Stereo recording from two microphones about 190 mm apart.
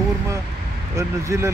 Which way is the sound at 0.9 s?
15° right (ahead or behind).